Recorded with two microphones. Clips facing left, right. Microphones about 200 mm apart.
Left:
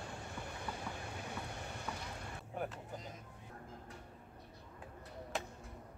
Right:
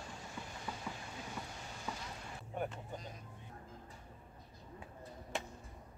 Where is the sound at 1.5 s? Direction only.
60° left (ahead or behind).